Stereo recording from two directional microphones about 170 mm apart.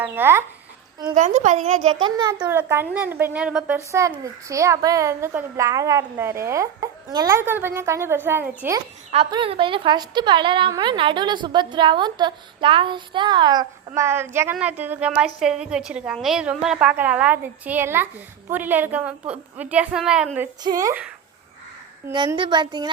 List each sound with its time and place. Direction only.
0.0 s a woman's voice: 15° right (ahead or behind)
1.0 s speech: 45° right (ahead or behind)
2.0 s a woman's voice: 25° right (ahead or behind)
2.4 s a woman's voice: 10° right (ahead or behind)
4.2 s a woman's voice: 20° right (ahead or behind)
9.3 s a woman's voice: 30° right (ahead or behind); by 20.5 s 5° right (ahead or behind)
20.7 s a woman's voice: 20° right (ahead or behind)
22.4 s a woman's voice: 25° right (ahead or behind)